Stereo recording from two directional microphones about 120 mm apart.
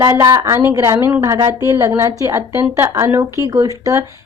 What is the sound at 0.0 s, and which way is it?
A woman's voice, 30° right (ahead or behind).